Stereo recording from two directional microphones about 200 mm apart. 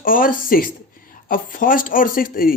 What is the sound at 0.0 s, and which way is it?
Speech, 45° left (ahead or behind).